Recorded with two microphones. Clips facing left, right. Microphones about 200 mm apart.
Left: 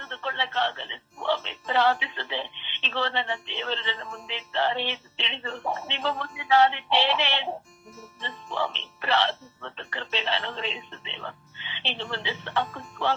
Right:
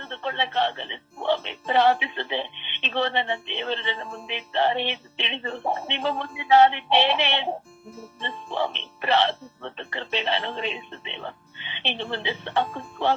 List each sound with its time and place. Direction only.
0.0 s speech: 20° right (ahead or behind)
5.6 s speech: 30° right (ahead or behind)
6.0 s speech: 20° right (ahead or behind)
8.5 s speech: 15° right (ahead or behind)